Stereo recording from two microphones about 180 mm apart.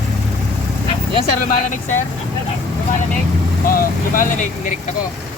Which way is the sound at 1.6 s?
45° left (ahead or behind).